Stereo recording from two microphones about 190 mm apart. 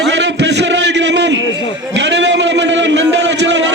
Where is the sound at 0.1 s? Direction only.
70° right (ahead or behind).